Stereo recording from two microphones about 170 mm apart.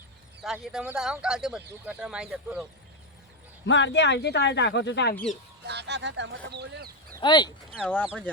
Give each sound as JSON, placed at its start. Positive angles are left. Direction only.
{"t": 0.4, "sound": "speech", "side_deg": -5}
{"t": 3.7, "sound": "speech", "side_deg": 90}
{"t": 5.1, "sound": "speech", "side_deg": 5}
{"t": 5.6, "sound": "speech", "side_deg": -85}
{"t": 6.5, "sound": "speech", "side_deg": -75}
{"t": 7.2, "sound": "speech", "side_deg": 25}